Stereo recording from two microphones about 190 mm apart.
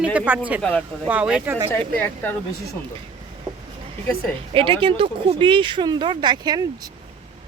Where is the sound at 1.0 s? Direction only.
5° right (ahead or behind).